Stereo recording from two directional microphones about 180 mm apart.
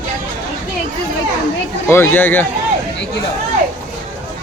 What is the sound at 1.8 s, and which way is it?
Speech, 10° left (ahead or behind).